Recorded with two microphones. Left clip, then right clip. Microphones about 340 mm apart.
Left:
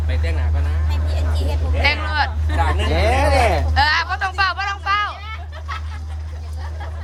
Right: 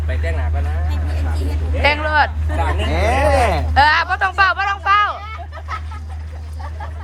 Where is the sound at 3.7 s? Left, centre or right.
Centre.